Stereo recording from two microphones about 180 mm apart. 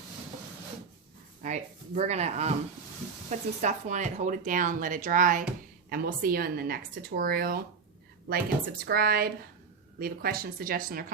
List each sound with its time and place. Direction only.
1.4 s a woman's voice: 40° right (ahead or behind)